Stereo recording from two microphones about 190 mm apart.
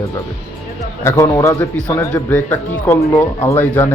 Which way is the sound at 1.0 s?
15° left (ahead or behind).